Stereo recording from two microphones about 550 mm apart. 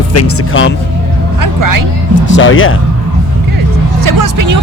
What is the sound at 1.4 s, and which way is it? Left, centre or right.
Speech, right.